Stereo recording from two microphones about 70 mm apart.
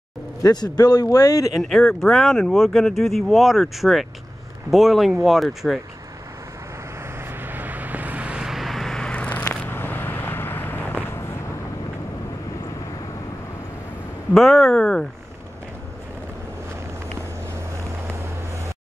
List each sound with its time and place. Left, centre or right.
0.4 s a man's voice: left
1.6 s speech: centre
7.4 s vehicle: right
8.5 s vehicle: centre
9.1 s vehicle: centre; by 11.3 s left
14.3 s speech: centre